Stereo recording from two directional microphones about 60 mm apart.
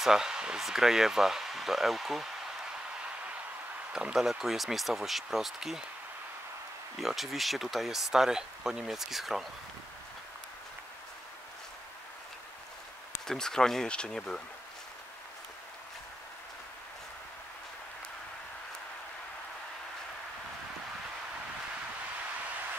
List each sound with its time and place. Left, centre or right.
0.0 s speech: centre
3.9 s speech: centre
7.0 s speech: centre
13.3 s speech: centre